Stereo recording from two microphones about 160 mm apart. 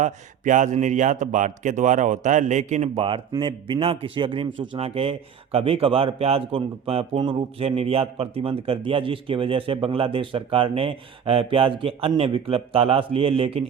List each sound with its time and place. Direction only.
0.0 s a man's voice: 50° right (ahead or behind)